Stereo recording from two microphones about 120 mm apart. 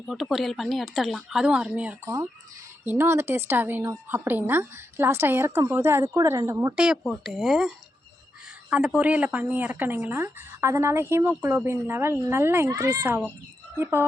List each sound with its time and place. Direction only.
0.1 s a woman's voice: centre (ahead or behind); by 6.7 s 25° right (ahead or behind)
6.7 s a woman's voice: 5° right (ahead or behind)
8.7 s a woman's voice: 10° right (ahead or behind)